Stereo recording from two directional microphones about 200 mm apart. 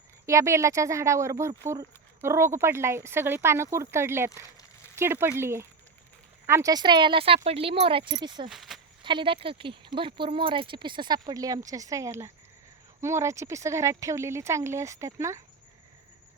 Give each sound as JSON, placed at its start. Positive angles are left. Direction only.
{"t": 0.3, "sound": "speech", "side_deg": -15}
{"t": 8.4, "sound": "speech", "side_deg": 0}
{"t": 9.0, "sound": "speech", "side_deg": -25}